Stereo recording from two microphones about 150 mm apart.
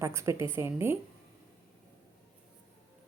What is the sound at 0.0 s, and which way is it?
Speech, 20° right (ahead or behind).